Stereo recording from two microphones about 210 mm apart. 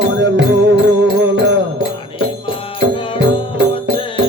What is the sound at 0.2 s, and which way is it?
Music, 60° right (ahead or behind).